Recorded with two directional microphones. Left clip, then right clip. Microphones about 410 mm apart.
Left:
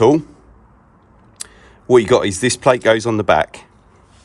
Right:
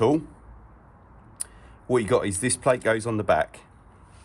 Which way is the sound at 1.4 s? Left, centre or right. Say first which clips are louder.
Left 7 dB; centre.